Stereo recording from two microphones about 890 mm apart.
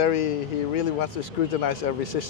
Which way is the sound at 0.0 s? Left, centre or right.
Left.